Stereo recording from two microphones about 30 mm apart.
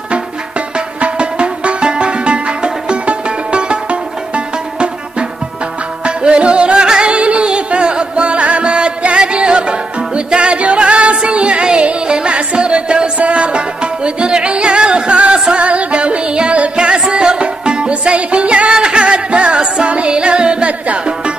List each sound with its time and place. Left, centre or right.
1.0 s music: right
6.0 s music: right
8.7 s music: right
18.1 s music: right
18.7 s music: right